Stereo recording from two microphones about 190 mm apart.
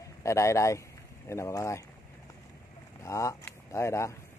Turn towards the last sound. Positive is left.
turn(degrees=15)  # may be behind; listen again after turning